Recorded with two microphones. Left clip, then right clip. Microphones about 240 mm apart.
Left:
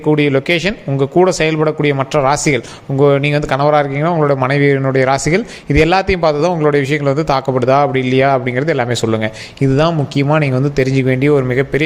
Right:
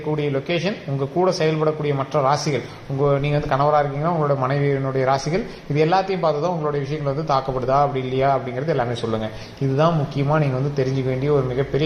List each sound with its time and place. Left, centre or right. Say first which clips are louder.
0.1 s speech: left 10 dB; left